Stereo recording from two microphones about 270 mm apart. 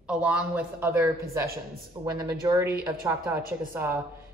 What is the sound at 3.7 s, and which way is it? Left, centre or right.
Speech, centre.